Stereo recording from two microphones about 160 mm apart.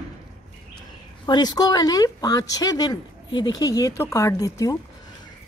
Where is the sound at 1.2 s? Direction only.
25° left (ahead or behind).